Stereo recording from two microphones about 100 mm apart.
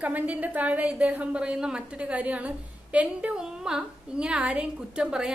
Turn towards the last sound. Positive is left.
turn(degrees=-5)  # may be behind; listen again after turning